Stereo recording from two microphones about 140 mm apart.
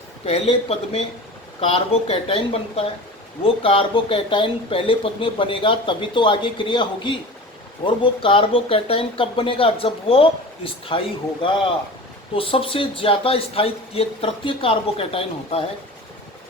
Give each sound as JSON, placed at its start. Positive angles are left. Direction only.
{"t": 0.3, "sound": "speech", "side_deg": 45}
{"t": 12.4, "sound": "speech", "side_deg": 40}